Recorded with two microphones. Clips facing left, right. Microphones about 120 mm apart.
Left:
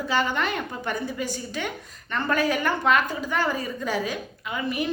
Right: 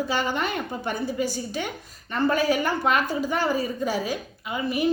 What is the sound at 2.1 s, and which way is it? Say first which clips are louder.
A woman's voice: right 2 dB; 35° right (ahead or behind).